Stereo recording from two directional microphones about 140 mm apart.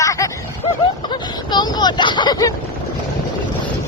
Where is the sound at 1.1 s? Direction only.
30° left (ahead or behind).